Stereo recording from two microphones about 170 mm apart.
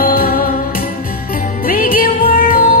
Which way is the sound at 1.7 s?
60° left (ahead or behind).